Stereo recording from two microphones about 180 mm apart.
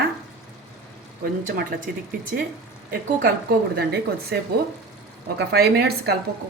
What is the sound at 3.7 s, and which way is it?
A woman's voice, 60° right (ahead or behind).